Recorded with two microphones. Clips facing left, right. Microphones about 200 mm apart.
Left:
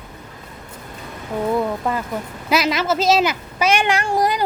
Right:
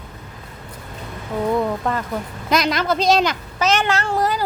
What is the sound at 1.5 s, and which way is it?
Speech, 5° left (ahead or behind).